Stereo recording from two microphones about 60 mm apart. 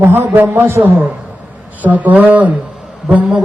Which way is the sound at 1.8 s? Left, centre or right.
Right.